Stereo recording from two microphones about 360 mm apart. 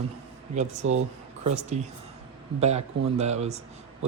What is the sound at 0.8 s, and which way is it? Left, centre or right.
Speech, right.